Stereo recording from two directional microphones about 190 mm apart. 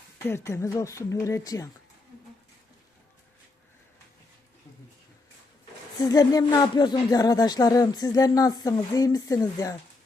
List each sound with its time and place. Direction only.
0.3 s speech: 15° left (ahead or behind)
6.0 s speech: 20° left (ahead or behind)